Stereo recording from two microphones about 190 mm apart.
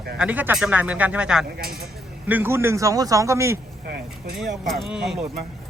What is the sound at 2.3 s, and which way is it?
A man's voice, 10° right (ahead or behind).